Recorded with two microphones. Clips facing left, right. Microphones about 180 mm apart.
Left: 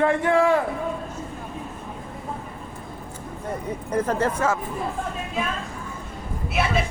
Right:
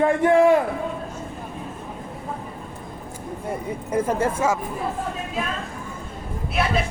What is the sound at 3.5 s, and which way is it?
Speech, 10° right (ahead or behind).